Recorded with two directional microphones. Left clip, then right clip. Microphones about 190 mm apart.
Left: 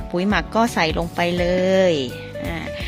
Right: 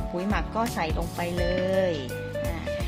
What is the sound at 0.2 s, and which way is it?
Speech, 55° left (ahead or behind).